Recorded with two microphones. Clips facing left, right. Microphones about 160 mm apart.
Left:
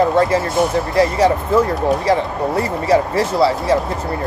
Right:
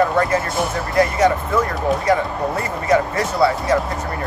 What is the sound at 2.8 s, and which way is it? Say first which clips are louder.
Speech: left 1 dB; 30° left (ahead or behind).